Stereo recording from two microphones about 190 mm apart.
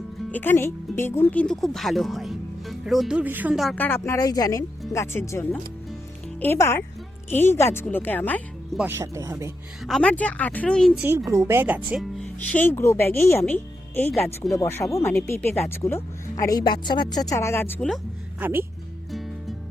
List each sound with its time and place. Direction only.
0.3 s speech: 10° left (ahead or behind)
8.8 s speech: 15° right (ahead or behind)
9.8 s speech: 5° left (ahead or behind)
11.3 s speech: 15° right (ahead or behind); by 18.0 s 5° left (ahead or behind)
18.3 s speech: 10° right (ahead or behind)